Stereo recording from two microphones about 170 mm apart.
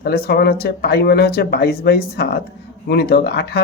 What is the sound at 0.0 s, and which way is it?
Speech, 65° left (ahead or behind).